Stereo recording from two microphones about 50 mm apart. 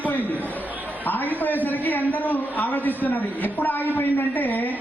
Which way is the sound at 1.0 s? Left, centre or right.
Left.